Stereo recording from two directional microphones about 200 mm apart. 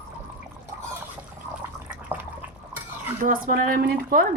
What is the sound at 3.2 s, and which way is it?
A woman's voice, 45° right (ahead or behind).